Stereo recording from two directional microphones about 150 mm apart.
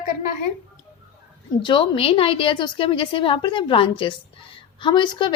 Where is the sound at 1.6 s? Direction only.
35° left (ahead or behind).